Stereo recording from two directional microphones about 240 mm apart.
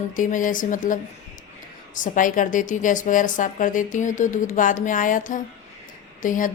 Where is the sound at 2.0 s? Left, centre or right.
Left.